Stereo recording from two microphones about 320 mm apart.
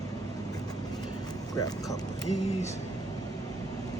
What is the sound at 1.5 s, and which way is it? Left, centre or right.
Speech, centre.